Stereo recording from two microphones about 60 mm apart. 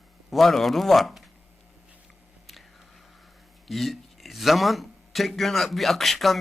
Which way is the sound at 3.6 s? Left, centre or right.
Centre.